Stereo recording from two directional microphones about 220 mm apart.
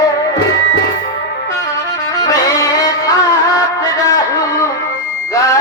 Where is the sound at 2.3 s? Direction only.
15° left (ahead or behind).